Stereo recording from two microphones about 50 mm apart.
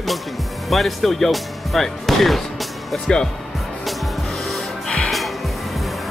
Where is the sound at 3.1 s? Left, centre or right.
Centre.